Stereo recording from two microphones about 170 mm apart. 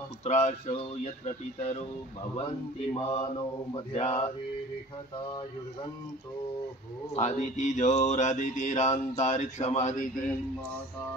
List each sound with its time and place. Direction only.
0.2 s speech: 45° left (ahead or behind)
2.9 s speech: 30° left (ahead or behind)
7.2 s mantra: 45° left (ahead or behind)